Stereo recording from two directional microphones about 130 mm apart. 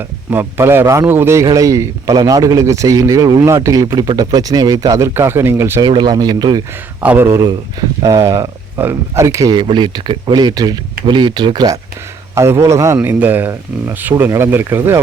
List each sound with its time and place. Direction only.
0.3 s a man's voice: 20° right (ahead or behind)
5.8 s speech: 35° right (ahead or behind)
7.0 s a man's voice: 15° right (ahead or behind)